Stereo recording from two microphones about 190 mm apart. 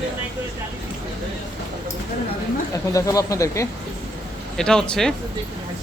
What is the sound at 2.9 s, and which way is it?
Speech, 15° left (ahead or behind).